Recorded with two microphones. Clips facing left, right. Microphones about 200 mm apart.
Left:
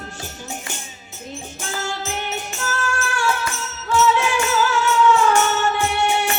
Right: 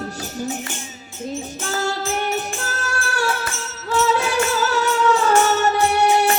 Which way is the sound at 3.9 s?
40° right (ahead or behind).